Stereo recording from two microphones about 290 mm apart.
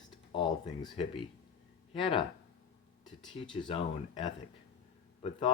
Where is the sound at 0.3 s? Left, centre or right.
Centre.